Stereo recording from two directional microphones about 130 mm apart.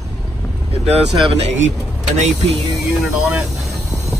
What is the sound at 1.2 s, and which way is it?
Speech, 55° right (ahead or behind).